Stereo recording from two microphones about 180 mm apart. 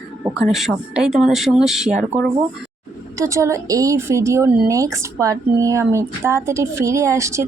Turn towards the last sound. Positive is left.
turn(degrees=-15)  # may be behind; listen again after turning